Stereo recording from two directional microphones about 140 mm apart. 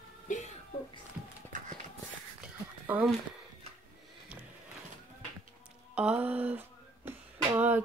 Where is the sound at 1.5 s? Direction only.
65° right (ahead or behind).